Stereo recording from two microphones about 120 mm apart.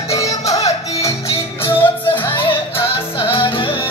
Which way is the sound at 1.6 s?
15° left (ahead or behind).